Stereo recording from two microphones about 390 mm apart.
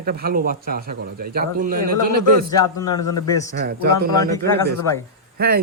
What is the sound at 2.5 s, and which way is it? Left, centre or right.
Speech, centre.